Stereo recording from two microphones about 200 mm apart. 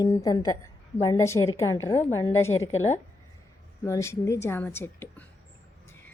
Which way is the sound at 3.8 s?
15° left (ahead or behind).